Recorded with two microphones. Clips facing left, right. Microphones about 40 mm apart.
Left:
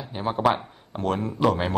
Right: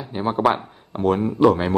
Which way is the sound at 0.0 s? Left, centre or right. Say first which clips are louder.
Right 3 dB; centre.